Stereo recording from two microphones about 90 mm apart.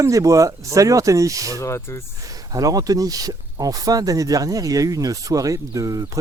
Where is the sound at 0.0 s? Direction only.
35° right (ahead or behind).